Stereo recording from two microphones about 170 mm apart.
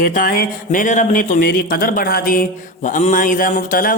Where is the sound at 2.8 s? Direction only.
50° left (ahead or behind).